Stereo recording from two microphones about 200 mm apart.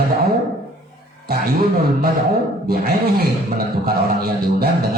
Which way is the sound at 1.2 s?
50° right (ahead or behind).